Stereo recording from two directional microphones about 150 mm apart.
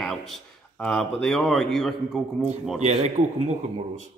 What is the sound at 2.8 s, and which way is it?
Speech, 45° right (ahead or behind).